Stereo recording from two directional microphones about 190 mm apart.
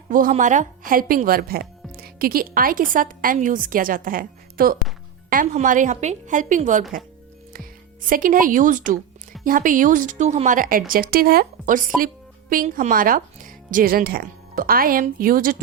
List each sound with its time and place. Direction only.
0.1 s a woman's voice: 45° right (ahead or behind)
8.1 s speech: 45° right (ahead or behind)